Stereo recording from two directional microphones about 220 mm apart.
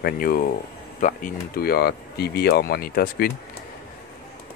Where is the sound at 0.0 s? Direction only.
40° left (ahead or behind).